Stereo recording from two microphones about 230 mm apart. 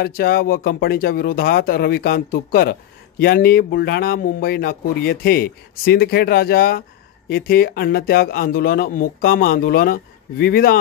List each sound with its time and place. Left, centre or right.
0.0 s speech: left